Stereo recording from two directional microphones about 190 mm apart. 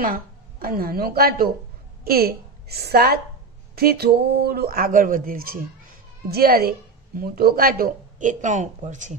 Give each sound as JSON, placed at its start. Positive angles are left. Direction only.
{"t": 0.0, "sound": "a woman's voice", "side_deg": -50}